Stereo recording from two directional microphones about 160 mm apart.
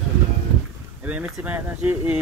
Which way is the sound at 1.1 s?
10° right (ahead or behind).